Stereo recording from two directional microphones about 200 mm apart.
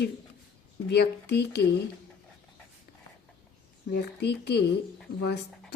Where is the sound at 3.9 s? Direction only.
55° left (ahead or behind).